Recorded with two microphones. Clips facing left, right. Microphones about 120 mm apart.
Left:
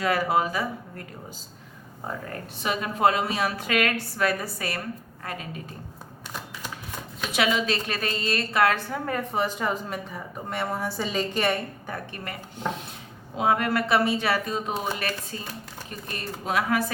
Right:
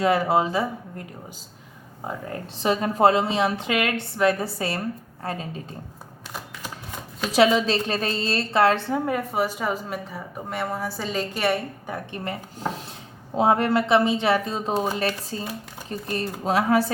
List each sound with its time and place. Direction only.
0.0 s a woman's voice: 25° right (ahead or behind)
2.6 s a woman's voice: 35° right (ahead or behind)
7.2 s a woman's voice: 35° right (ahead or behind)
9.0 s speech: 10° right (ahead or behind)
12.1 s a woman's voice: 25° right (ahead or behind)